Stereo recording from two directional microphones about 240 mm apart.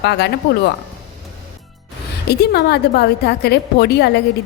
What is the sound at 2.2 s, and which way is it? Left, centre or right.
A woman's voice, left.